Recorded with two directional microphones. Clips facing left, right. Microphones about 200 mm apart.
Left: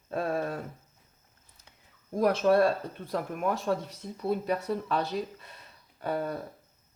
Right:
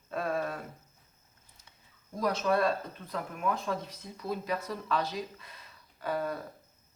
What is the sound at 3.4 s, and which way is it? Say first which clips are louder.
Speech: left 2 dB; 35° left (ahead or behind).